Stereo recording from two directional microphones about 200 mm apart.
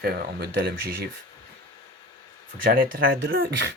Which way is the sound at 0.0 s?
50° right (ahead or behind).